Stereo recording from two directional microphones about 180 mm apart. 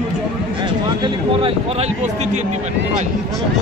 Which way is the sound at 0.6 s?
25° right (ahead or behind).